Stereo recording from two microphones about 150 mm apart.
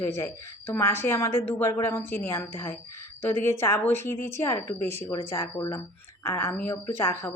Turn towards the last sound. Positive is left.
turn(degrees=15)  # may be behind; listen again after turning